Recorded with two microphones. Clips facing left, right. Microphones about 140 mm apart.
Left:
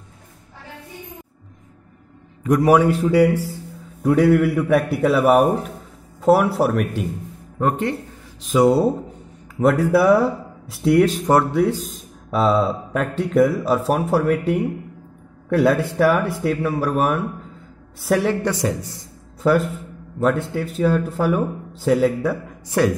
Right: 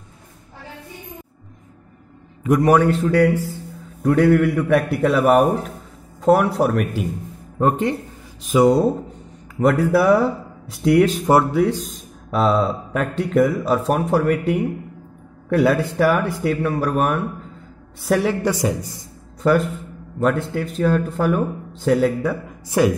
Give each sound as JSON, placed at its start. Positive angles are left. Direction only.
{"t": 2.4, "sound": "a man's voice", "side_deg": 0}
{"t": 2.7, "sound": "a man's voice", "side_deg": 10}
{"t": 7.5, "sound": "speech", "side_deg": -20}
{"t": 8.5, "sound": "a man's voice", "side_deg": 0}
{"t": 18.5, "sound": "speech", "side_deg": -10}
{"t": 19.4, "sound": "a man's voice", "side_deg": 0}
{"t": 22.7, "sound": "speech", "side_deg": -10}